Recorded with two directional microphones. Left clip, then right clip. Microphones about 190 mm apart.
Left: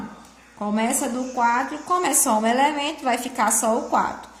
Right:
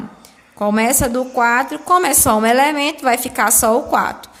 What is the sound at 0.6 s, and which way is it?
A woman's voice, 45° right (ahead or behind).